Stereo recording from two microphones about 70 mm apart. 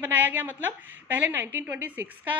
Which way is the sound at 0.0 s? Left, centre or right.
Right.